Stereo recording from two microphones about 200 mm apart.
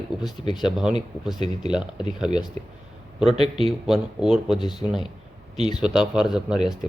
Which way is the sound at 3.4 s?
30° right (ahead or behind).